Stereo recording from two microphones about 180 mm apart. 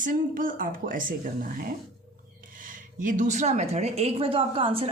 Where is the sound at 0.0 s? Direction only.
50° right (ahead or behind).